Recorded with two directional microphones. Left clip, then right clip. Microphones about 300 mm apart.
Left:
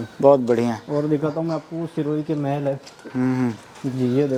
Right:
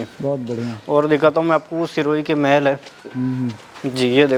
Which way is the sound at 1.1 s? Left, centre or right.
Centre.